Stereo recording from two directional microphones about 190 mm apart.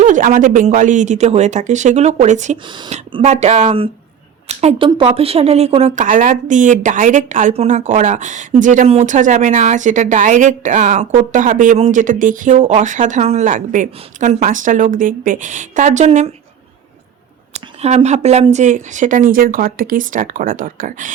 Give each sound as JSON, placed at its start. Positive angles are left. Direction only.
{"t": 0.0, "sound": "speech", "side_deg": -40}
{"t": 17.5, "sound": "speech", "side_deg": -35}